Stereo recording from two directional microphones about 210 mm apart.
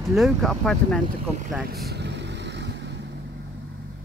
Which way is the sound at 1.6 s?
50° right (ahead or behind).